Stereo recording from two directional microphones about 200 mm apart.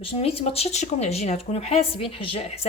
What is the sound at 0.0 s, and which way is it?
Speech, 30° left (ahead or behind).